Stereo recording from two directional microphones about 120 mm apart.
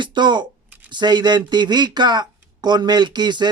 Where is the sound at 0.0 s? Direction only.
40° right (ahead or behind).